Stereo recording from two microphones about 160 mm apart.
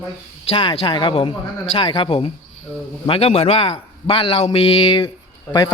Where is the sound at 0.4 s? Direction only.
35° left (ahead or behind).